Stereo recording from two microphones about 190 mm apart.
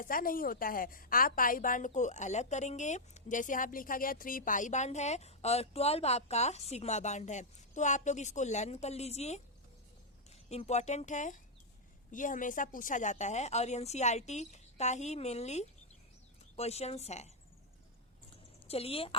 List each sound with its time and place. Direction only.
0.0 s a woman's voice: 50° left (ahead or behind)
10.5 s a woman's voice: 35° left (ahead or behind)
18.7 s a woman's voice: 30° left (ahead or behind)